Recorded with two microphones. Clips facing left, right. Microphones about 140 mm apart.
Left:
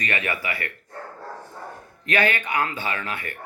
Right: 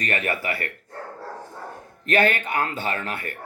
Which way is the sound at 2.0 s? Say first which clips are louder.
Right 2 dB; 45° right (ahead or behind).